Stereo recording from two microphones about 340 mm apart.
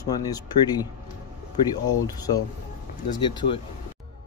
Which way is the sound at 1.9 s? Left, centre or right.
Centre.